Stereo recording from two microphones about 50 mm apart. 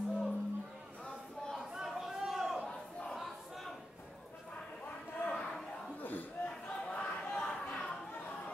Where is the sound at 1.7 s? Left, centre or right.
Centre.